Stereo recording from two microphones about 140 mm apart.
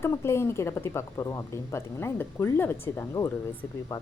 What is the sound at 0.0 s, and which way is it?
A woman's voice, 20° left (ahead or behind).